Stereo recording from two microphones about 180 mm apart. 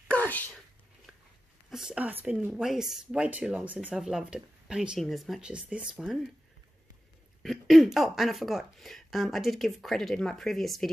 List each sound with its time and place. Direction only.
0.1 s whispering: 10° left (ahead or behind)
1.1 s a sound: 5° right (ahead or behind)
1.7 s speech: 5° right (ahead or behind)
7.4 s speech: centre (ahead or behind)